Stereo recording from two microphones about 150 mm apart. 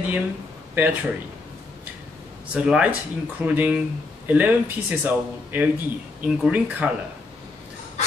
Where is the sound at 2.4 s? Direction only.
5° right (ahead or behind).